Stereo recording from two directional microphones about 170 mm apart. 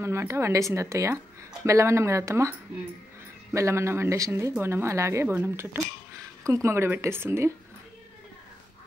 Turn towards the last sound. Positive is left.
turn(degrees=-15)  # may be behind; listen again after turning